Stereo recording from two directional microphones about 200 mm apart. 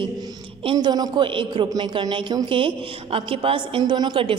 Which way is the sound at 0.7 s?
20° right (ahead or behind).